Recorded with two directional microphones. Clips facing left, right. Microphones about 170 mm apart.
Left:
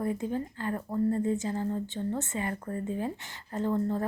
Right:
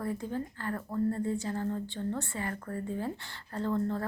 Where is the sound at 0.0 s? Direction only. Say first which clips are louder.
Left 3 dB; 20° left (ahead or behind).